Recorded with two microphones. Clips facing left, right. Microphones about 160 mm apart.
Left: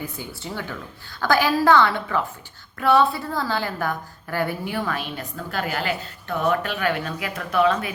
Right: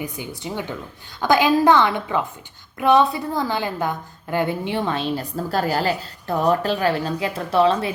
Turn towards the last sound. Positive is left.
turn(degrees=-30)  # may be behind; listen again after turning